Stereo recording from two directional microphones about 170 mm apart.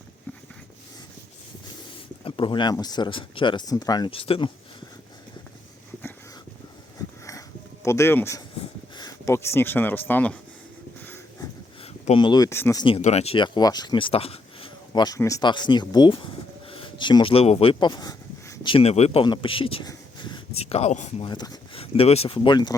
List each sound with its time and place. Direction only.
2.2 s speech: 30° left (ahead or behind)
7.3 s a sound: 20° left (ahead or behind)
9.0 s speech: 20° left (ahead or behind)
11.0 s a sound: 10° left (ahead or behind)
11.8 s speech: 30° left (ahead or behind); by 12.8 s 15° left (ahead or behind)
13.0 s speech: 40° left (ahead or behind); by 18.7 s 20° left (ahead or behind)
18.7 s speech: 35° left (ahead or behind)
19.9 s a sound: 25° left (ahead or behind); by 21.2 s 40° left (ahead or behind)
21.2 s speech: 25° left (ahead or behind)
21.8 s speech: 35° left (ahead or behind)